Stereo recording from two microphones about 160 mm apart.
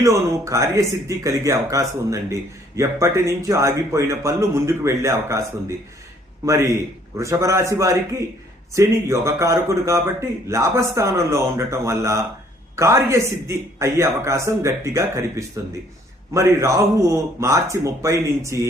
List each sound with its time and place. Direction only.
0.0 s a man's voice: 20° right (ahead or behind)